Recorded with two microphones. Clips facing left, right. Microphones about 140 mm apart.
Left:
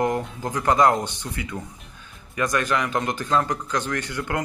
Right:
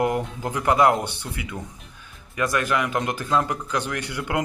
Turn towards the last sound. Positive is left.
turn(degrees=-15)  # may be behind; listen again after turning